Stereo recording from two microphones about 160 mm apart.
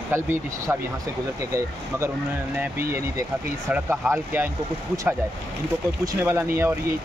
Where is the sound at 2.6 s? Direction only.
15° right (ahead or behind).